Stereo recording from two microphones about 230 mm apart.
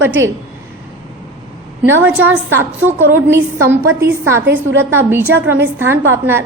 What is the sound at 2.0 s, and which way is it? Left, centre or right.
A woman's voice, centre.